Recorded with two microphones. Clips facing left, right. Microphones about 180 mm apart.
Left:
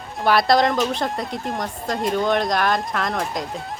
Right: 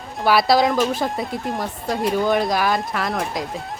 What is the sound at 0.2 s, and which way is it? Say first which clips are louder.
Speech: right 1 dB; 5° right (ahead or behind).